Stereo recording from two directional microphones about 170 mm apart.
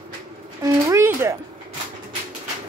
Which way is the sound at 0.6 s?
15° right (ahead or behind).